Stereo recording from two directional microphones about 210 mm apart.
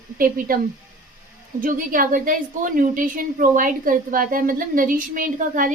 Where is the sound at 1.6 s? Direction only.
40° right (ahead or behind).